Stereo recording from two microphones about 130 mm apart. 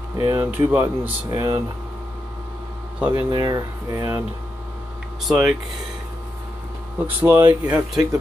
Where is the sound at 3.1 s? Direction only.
30° right (ahead or behind).